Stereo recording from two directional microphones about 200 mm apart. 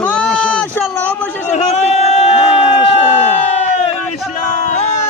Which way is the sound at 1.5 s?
30° left (ahead or behind).